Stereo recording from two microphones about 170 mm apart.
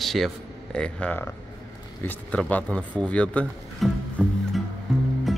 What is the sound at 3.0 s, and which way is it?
Music, 5° left (ahead or behind).